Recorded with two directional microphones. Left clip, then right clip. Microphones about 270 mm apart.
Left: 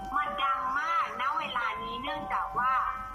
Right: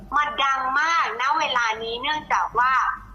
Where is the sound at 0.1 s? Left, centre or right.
Centre.